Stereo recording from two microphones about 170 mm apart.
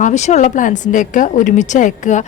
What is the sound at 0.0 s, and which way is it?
A woman's voice, 45° left (ahead or behind).